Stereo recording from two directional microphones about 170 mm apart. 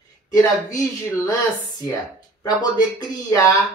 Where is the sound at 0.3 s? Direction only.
20° left (ahead or behind).